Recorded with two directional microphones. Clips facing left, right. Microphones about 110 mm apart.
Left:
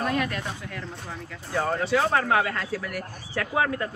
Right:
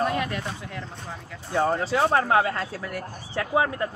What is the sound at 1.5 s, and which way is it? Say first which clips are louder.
Speech: right 1 dB; 20° right (ahead or behind).